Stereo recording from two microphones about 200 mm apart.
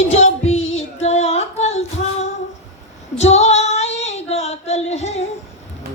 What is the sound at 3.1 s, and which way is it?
Female singing, 35° left (ahead or behind).